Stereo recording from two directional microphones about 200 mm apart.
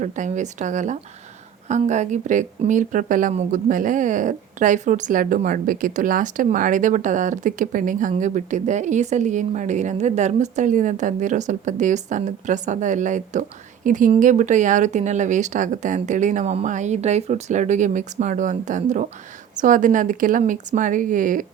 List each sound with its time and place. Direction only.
0.0 s speech: 35° right (ahead or behind)